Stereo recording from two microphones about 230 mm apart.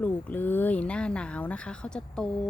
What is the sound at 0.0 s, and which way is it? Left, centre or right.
Speech, centre.